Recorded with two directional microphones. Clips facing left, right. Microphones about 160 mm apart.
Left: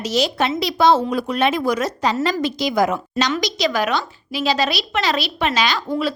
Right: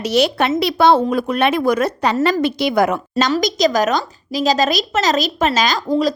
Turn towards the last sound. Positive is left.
turn(degrees=-40)  # may be behind; listen again after turning